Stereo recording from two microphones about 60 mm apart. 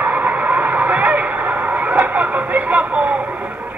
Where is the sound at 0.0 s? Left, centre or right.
Right.